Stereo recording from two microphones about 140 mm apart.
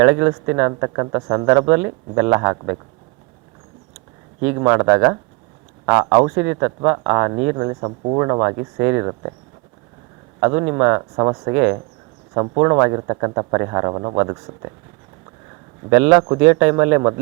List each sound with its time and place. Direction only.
0.0 s speech: 20° right (ahead or behind)
4.6 s speech: 15° right (ahead or behind)
10.4 s speech: 20° right (ahead or behind)
15.9 s speech: 10° right (ahead or behind)